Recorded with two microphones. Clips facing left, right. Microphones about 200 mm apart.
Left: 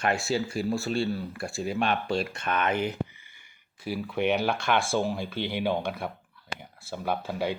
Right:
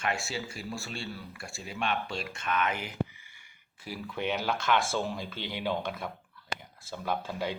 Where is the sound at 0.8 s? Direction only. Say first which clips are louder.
Left 11 dB; 40° left (ahead or behind).